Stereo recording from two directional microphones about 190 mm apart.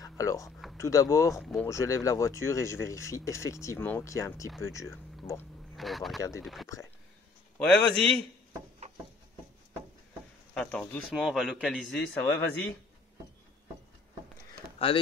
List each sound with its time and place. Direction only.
0.0 s a sound: 15° left (ahead or behind)
0.7 s speech: 15° left (ahead or behind)
1.4 s speech: centre (ahead or behind)
1.7 s speech: 15° left (ahead or behind)
5.2 s a sound: 15° left (ahead or behind)
5.8 s speech: centre (ahead or behind)
10.5 s speech: 5° left (ahead or behind)